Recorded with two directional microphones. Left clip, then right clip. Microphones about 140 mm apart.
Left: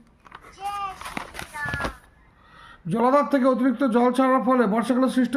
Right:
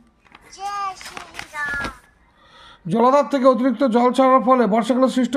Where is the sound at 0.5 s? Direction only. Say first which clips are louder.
Right 4 dB; 90° right.